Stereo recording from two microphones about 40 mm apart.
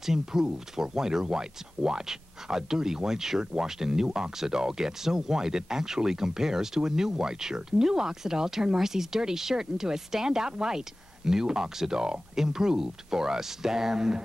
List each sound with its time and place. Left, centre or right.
0.0 s speech: centre